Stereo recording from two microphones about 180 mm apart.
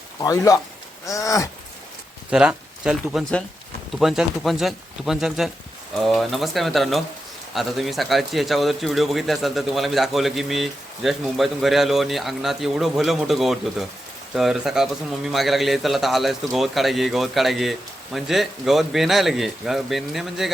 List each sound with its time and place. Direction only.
0.2 s speech: 20° left (ahead or behind)
2.3 s a man's voice: 5° right (ahead or behind)